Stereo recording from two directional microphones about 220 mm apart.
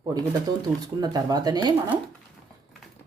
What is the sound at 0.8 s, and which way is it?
Speech, 15° right (ahead or behind).